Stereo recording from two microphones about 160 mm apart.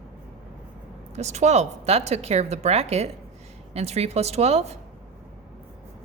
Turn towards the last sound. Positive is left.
turn(degrees=-40)  # may be behind; listen again after turning